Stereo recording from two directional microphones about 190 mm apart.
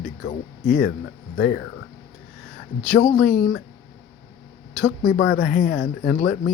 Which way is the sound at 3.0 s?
45° left (ahead or behind).